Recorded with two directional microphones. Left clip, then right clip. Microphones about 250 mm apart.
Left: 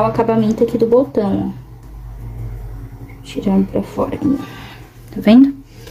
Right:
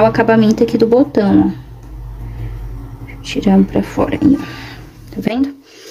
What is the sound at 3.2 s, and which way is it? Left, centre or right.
Speech, centre.